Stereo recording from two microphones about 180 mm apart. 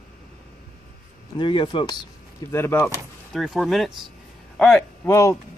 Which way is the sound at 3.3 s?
Centre (ahead or behind).